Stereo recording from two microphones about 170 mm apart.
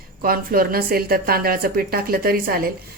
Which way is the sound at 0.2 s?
60° right (ahead or behind).